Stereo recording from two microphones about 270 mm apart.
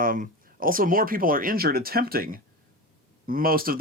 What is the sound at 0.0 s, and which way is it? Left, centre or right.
Speech, right.